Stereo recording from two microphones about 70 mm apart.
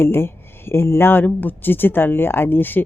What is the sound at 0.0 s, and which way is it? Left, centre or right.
A woman's voice, left.